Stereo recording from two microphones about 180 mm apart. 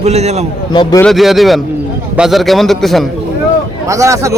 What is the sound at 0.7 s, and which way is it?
Speech, 25° left (ahead or behind).